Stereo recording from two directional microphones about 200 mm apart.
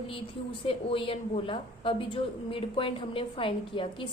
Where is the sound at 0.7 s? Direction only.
25° left (ahead or behind).